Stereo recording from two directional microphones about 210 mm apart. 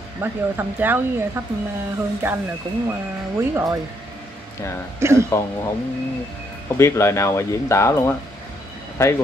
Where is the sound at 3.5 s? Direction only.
15° right (ahead or behind).